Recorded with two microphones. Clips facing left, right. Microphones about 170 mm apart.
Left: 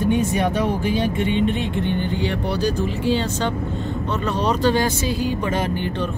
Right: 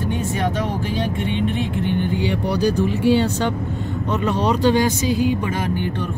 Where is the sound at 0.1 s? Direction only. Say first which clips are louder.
Left 2 dB; 15° left (ahead or behind).